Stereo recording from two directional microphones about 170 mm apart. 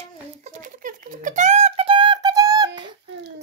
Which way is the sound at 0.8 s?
50° right (ahead or behind).